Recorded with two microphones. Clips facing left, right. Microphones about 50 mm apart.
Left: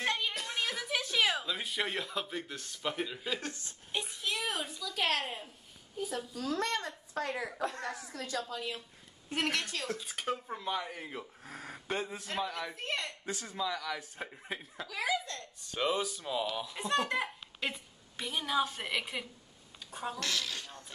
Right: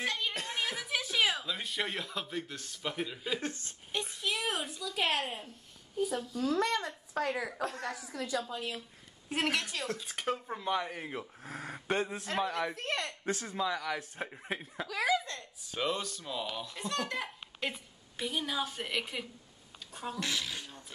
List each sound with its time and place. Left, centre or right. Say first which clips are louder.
0.0 s music: left 1 dB; centre
0.3 s music: right 1 dB; right
0.6 s speech: left 1 dB; centre
3.9 s a sound: right 1 dB; centre
5.9 s dishes: right 4 dB; centre
6.3 s a woman's voice: right 3 dB; centre
9.4 s dishes: right 1 dB; centre
13.2 s speech: right 5 dB; right
13.5 s a woman's voice: even; centre
15.6 s dishes: left 2 dB; centre
16.4 s a woman's voice: left 3 dB; centre
20.2 s speech: right 2 dB; centre